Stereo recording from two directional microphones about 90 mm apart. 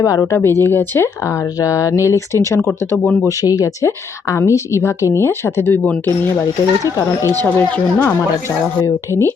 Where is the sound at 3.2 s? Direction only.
40° left (ahead or behind); by 8.1 s 20° left (ahead or behind).